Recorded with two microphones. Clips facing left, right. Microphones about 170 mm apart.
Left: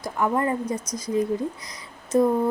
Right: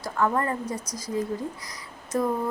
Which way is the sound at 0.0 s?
15° left (ahead or behind).